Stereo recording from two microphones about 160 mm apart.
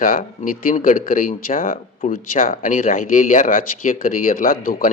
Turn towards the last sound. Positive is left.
turn(degrees=65)  # may be behind; listen again after turning